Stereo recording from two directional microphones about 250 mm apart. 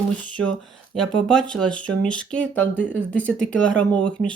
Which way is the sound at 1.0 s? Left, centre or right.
Centre.